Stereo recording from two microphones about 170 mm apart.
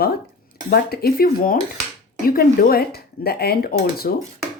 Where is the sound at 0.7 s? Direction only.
65° left (ahead or behind).